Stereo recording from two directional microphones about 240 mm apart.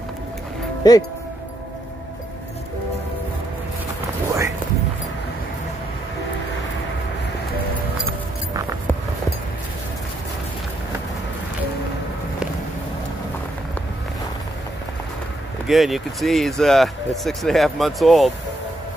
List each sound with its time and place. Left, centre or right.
0.8 s speech: centre
15.6 s speech: centre